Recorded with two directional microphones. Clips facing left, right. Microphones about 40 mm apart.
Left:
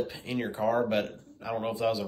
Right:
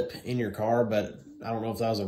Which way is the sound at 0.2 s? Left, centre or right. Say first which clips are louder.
Even; left.